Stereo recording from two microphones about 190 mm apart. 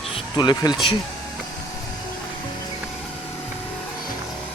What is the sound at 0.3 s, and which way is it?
Speech, 20° left (ahead or behind).